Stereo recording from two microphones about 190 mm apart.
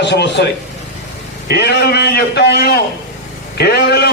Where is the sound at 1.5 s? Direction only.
60° left (ahead or behind).